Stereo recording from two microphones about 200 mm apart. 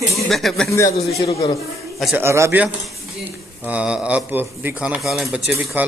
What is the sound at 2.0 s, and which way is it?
Speech, centre (ahead or behind).